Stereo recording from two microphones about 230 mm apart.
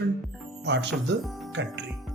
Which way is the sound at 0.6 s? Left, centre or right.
Right.